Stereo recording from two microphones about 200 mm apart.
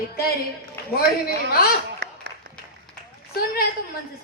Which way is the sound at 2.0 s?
60° right (ahead or behind).